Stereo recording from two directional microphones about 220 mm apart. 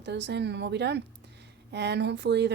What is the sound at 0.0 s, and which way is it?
Speech, 55° right (ahead or behind).